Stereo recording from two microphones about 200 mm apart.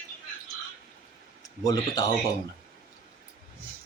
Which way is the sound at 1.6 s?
20° left (ahead or behind).